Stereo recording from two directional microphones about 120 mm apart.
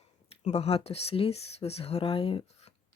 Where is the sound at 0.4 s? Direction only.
60° left (ahead or behind).